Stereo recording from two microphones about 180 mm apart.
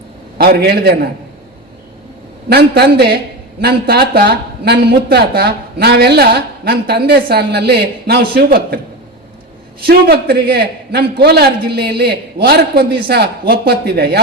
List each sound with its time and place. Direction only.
0.3 s a man's voice: 60° right (ahead or behind)
2.5 s speech: 60° right (ahead or behind)
9.8 s speech: 60° right (ahead or behind)